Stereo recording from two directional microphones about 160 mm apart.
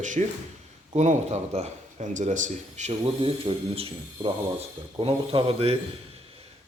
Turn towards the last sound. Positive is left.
turn(degrees=-35)  # may be behind; listen again after turning